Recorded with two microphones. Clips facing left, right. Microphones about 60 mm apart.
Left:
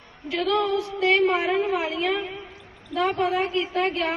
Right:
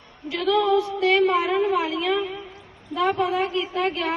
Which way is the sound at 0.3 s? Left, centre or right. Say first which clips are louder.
Right 3 dB; left.